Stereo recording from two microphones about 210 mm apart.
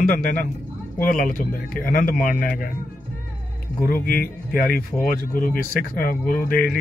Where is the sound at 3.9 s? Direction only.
40° left (ahead or behind).